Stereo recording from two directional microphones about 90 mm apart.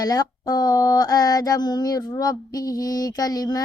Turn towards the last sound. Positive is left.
turn(degrees=45)  # may be behind; listen again after turning